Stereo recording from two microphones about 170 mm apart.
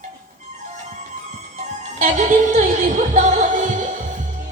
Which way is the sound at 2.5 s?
45° right (ahead or behind).